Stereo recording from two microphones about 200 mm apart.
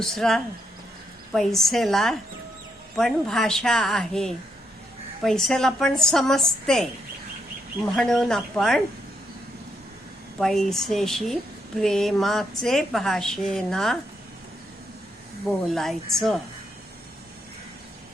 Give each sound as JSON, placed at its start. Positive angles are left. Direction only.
{"t": 0.0, "sound": "a woman's voice", "side_deg": 0}
{"t": 7.9, "sound": "a woman's voice", "side_deg": 0}
{"t": 10.4, "sound": "a woman's voice", "side_deg": 0}
{"t": 15.4, "sound": "a woman's voice", "side_deg": 0}